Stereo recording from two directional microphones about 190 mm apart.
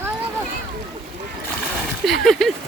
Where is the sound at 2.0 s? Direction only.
Centre (ahead or behind).